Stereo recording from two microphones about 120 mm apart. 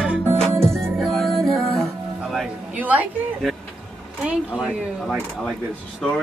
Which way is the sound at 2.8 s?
15° right (ahead or behind).